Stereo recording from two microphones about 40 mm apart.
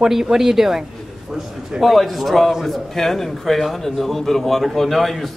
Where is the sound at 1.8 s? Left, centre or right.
Centre.